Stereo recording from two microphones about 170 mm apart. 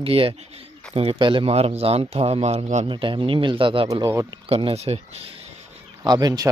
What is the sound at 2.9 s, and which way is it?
A man's voice, 30° right (ahead or behind).